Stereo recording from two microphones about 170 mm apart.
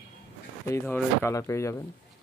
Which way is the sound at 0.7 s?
15° left (ahead or behind).